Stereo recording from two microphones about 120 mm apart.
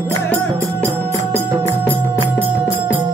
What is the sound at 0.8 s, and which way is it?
Music, 20° right (ahead or behind).